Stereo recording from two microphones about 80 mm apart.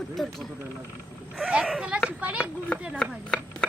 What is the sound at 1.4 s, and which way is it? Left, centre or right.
A woman's voice, centre.